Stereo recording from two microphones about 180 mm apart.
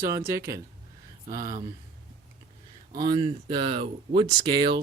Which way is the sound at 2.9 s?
25° right (ahead or behind).